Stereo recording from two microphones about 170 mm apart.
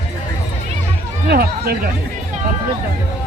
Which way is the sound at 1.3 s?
65° right (ahead or behind).